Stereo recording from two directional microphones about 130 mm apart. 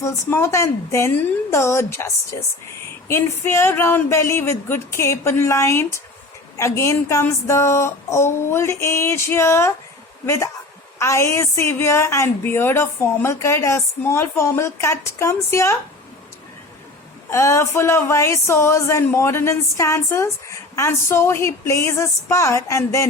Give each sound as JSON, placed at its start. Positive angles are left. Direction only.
{"t": 0.0, "sound": "speech", "side_deg": 20}
{"t": 17.2, "sound": "speech", "side_deg": 20}